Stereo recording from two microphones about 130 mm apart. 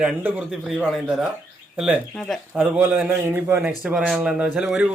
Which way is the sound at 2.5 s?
10° right (ahead or behind).